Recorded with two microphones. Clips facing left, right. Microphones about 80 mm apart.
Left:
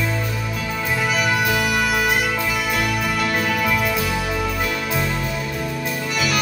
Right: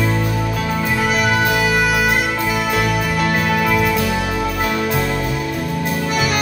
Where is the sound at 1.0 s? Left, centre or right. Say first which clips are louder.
Right 3 dB; right.